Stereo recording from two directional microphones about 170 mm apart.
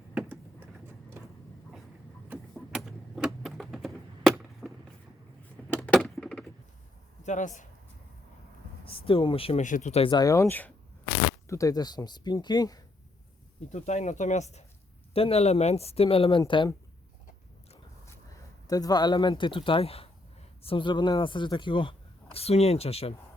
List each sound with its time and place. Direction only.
0.1 s vehicle: 10° right (ahead or behind)
2.3 s a sound: centre (ahead or behind)
7.3 s speech: 45° left (ahead or behind)
8.8 s speech: 30° left (ahead or behind)
9.6 s speech: 45° left (ahead or behind); by 12.8 s 25° left (ahead or behind)
13.7 s speech: 45° left (ahead or behind)
18.7 s speech: 20° left (ahead or behind)